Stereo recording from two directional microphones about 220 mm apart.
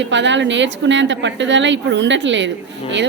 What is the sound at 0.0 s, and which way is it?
A woman's voice, 55° right (ahead or behind).